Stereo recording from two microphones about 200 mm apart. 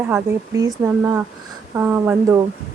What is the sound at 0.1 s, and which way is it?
Speech, 15° right (ahead or behind).